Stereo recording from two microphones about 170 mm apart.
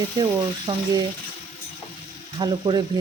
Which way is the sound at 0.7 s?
25° right (ahead or behind).